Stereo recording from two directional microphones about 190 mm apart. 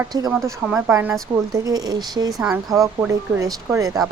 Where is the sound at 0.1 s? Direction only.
20° right (ahead or behind).